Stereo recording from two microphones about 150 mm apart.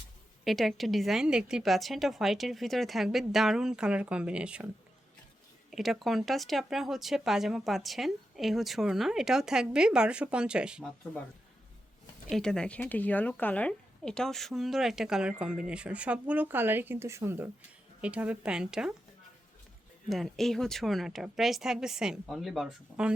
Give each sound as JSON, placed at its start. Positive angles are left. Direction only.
{"t": 0.4, "sound": "speech", "side_deg": 0}
{"t": 5.7, "sound": "speech", "side_deg": 0}
{"t": 12.3, "sound": "speech", "side_deg": 5}
{"t": 20.1, "sound": "speech", "side_deg": 0}